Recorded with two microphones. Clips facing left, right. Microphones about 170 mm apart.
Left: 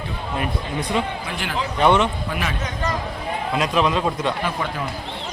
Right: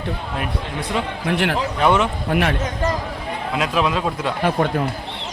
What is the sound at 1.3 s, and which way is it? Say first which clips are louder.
Speech: right 9 dB; 65° right (ahead or behind).